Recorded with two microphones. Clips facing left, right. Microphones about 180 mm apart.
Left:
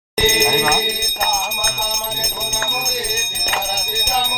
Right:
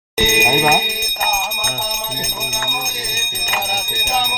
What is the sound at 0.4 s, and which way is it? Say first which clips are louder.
Music: right 2 dB; 20° right (ahead or behind).